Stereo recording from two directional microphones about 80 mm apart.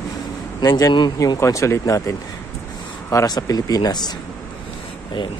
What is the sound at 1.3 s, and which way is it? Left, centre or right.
Speech, left.